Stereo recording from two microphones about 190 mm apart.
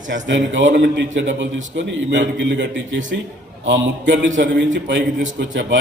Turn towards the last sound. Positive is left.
turn(degrees=-65)  # may be behind; listen again after turning